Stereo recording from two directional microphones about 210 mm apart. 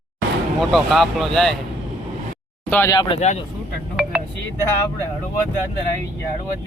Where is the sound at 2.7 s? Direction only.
15° left (ahead or behind); by 3.4 s 30° left (ahead or behind).